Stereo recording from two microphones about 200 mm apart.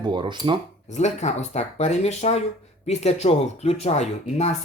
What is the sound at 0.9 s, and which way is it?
Speech, 35° left (ahead or behind).